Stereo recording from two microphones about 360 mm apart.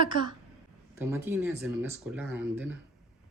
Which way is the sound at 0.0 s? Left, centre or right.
Centre.